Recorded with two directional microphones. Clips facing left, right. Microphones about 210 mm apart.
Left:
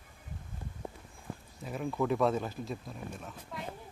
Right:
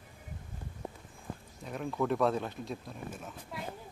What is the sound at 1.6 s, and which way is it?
Speech, centre (ahead or behind).